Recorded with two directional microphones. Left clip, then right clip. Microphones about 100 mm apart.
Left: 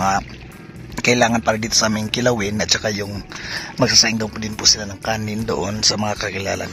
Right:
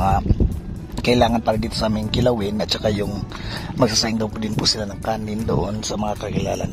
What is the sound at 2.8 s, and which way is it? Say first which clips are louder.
Speech: right 1 dB; 35° right (ahead or behind).